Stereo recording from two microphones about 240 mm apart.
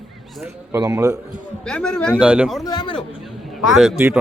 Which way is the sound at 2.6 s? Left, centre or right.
Centre.